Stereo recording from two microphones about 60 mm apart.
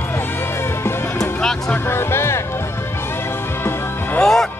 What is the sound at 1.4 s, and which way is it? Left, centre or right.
Music, centre.